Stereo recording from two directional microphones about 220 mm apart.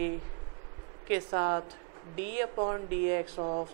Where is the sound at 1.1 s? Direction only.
20° right (ahead or behind).